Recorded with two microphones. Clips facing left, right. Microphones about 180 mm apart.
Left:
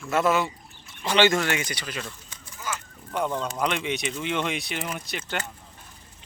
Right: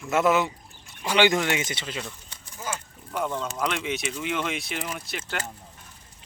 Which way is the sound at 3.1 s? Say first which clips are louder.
Left 2 dB; 5° right (ahead or behind).